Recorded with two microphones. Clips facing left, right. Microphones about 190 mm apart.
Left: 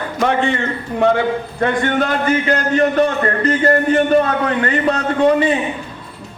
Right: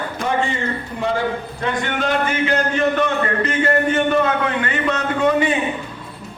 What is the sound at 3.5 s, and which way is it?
A man's voice, 40° left (ahead or behind).